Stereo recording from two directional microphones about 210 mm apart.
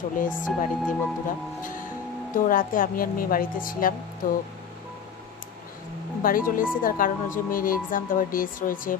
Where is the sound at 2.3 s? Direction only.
40° left (ahead or behind).